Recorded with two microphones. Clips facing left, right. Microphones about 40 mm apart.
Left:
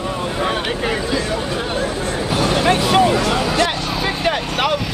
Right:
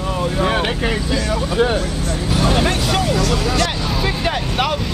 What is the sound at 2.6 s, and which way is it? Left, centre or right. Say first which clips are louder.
Vehicle: left 4 dB; left.